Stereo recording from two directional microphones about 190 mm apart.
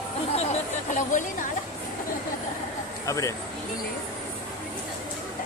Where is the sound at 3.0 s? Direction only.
15° left (ahead or behind).